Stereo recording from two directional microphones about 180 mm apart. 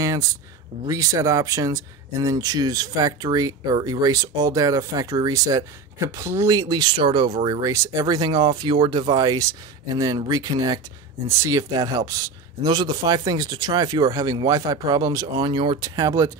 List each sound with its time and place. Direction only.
0.8 s speech: 20° right (ahead or behind)